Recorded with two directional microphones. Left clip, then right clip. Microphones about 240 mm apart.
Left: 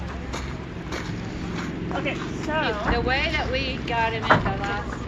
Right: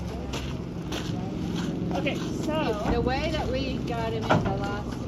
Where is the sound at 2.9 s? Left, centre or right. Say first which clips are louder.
Left 4 dB; right.